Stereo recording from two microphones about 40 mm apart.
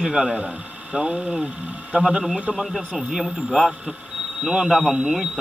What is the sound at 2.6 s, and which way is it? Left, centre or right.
Speech, centre.